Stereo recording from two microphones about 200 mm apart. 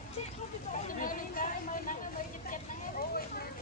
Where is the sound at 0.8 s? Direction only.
40° left (ahead or behind).